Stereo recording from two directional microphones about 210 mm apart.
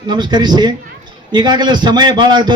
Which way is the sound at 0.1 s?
20° right (ahead or behind).